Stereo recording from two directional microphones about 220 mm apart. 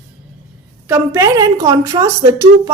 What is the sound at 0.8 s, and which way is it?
A woman's voice, 10° right (ahead or behind).